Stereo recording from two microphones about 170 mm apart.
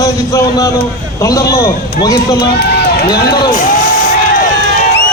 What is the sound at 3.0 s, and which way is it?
Speech, 25° left (ahead or behind).